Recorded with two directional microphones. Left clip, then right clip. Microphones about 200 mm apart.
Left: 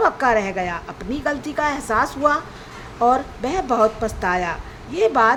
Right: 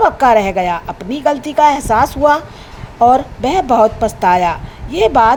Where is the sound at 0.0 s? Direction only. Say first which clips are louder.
Right 8 dB; 20° right (ahead or behind).